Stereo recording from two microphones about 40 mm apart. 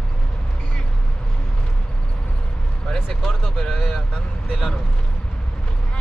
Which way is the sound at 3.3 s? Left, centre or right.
Centre.